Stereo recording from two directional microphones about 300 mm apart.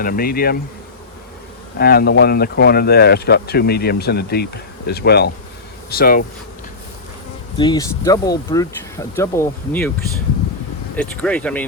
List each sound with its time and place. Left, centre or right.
0.0 s speech: left
1.8 s speech: left
7.6 s speech: centre
10.9 s speech: centre